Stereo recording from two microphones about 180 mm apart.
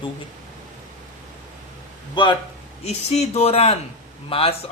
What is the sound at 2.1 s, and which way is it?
A man's voice, 25° left (ahead or behind).